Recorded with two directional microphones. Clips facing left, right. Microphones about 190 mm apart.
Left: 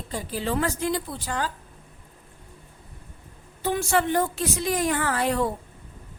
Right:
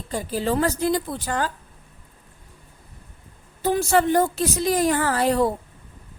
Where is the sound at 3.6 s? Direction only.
40° right (ahead or behind).